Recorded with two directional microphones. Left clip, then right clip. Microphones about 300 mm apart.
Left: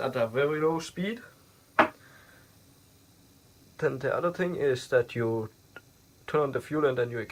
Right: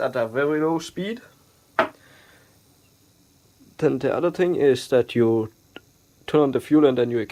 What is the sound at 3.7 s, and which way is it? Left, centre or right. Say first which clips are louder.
Speech: right 7 dB; right.